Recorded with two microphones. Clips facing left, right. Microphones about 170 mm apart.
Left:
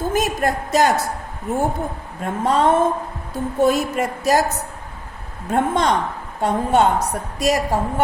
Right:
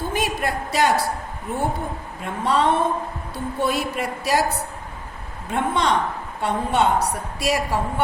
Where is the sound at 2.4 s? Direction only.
45° left (ahead or behind).